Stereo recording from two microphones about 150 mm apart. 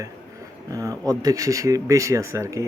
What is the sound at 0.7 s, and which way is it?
A man's voice, 25° right (ahead or behind).